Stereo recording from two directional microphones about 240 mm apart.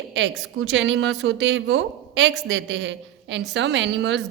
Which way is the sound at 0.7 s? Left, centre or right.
Right.